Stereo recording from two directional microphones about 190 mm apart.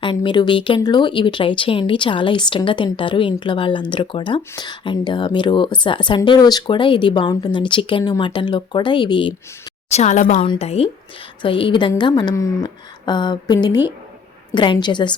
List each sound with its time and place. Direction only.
0.0 s speech: 25° left (ahead or behind)
9.9 s speech: 35° left (ahead or behind)